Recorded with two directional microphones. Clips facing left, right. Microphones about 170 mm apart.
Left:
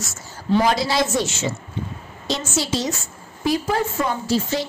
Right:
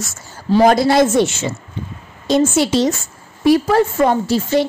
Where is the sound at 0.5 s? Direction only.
50° right (ahead or behind).